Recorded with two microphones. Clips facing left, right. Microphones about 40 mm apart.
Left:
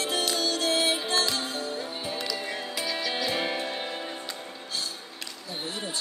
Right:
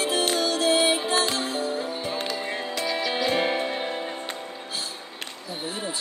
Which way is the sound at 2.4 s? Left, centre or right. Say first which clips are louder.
Right 3 dB; right.